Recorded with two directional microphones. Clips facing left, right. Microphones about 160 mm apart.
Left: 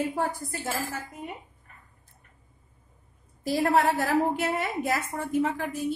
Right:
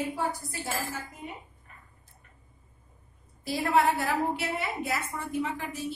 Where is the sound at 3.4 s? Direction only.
45° left (ahead or behind).